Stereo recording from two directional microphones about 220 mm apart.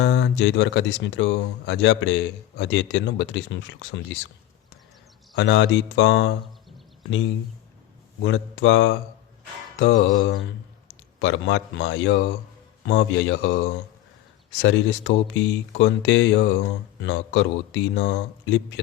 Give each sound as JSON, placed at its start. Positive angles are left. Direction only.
{"t": 0.0, "sound": "speech", "side_deg": 55}
{"t": 5.4, "sound": "speech", "side_deg": 55}
{"t": 8.2, "sound": "speech", "side_deg": 55}
{"t": 14.6, "sound": "speech", "side_deg": 55}